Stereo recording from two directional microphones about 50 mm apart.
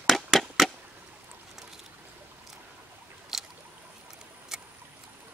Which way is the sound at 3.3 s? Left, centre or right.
Centre.